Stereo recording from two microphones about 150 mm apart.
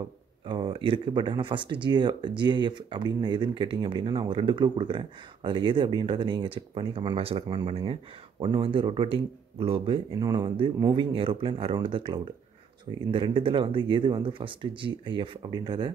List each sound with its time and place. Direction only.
0.5 s speech: 30° right (ahead or behind)
10.1 s speech: 30° right (ahead or behind)